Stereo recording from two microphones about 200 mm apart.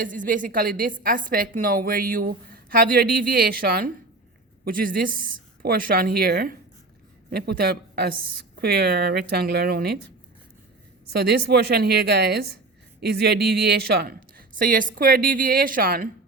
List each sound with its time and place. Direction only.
0.0 s a woman's voice: 45° right (ahead or behind)
11.1 s a woman's voice: 55° right (ahead or behind)